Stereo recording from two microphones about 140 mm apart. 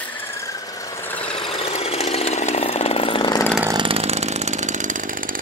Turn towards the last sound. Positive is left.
turn(degrees=-55)  # may be behind; listen again after turning